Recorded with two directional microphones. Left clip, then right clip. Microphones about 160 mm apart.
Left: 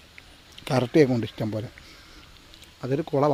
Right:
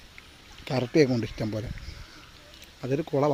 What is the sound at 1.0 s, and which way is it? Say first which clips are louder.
Speech: left 2 dB; 5° left (ahead or behind).